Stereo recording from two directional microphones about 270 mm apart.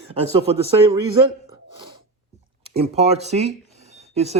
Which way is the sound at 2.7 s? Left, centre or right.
Right.